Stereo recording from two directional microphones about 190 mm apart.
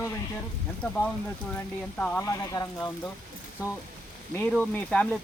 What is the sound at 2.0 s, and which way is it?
Speech, 10° left (ahead or behind).